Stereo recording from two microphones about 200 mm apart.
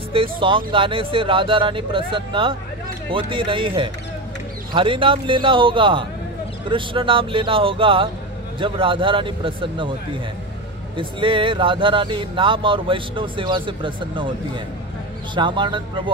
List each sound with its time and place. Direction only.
0.1 s speech: 25° right (ahead or behind)
11.0 s speech: 25° right (ahead or behind)
15.3 s speech: 25° right (ahead or behind)